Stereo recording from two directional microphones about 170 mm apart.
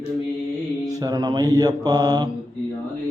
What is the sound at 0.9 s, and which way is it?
Mantra, 25° right (ahead or behind).